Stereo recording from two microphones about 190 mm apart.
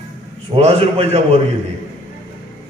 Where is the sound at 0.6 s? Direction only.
35° right (ahead or behind).